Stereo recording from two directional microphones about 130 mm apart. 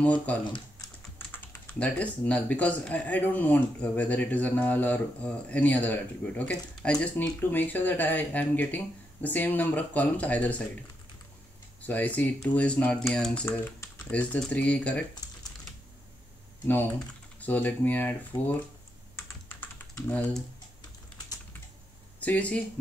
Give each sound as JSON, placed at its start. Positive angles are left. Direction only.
{"t": 0.0, "sound": "speech", "side_deg": 10}
{"t": 0.4, "sound": "speech", "side_deg": 35}
{"t": 1.1, "sound": "speech", "side_deg": 15}
{"t": 11.8, "sound": "speech", "side_deg": 10}
{"t": 16.6, "sound": "speech", "side_deg": 15}
{"t": 19.1, "sound": "computer keyboard", "side_deg": 20}
{"t": 22.2, "sound": "speech", "side_deg": 10}